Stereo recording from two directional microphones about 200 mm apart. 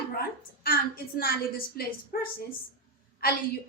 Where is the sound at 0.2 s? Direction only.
45° left (ahead or behind).